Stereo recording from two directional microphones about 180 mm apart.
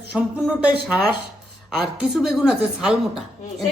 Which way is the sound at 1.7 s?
5° right (ahead or behind).